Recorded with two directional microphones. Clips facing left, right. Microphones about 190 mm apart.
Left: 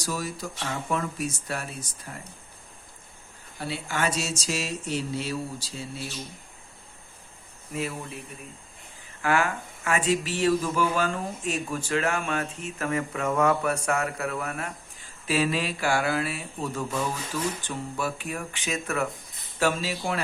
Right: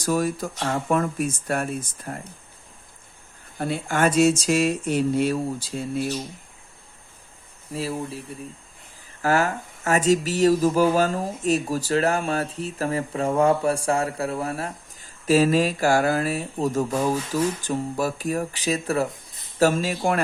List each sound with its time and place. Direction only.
0.0 s speech: 50° right (ahead or behind)
3.6 s speech: 50° right (ahead or behind)
7.7 s speech: 30° right (ahead or behind)
9.2 s speech: 40° right (ahead or behind)